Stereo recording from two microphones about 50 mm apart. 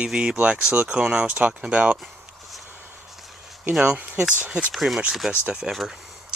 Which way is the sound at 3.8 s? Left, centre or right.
Right.